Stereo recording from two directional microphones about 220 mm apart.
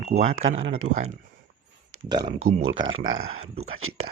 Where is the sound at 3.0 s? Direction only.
35° right (ahead or behind).